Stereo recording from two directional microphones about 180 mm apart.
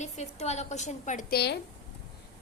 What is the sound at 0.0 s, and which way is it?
A woman's voice, 40° left (ahead or behind).